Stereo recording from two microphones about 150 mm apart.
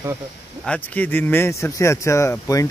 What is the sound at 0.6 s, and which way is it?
Speech, 10° left (ahead or behind).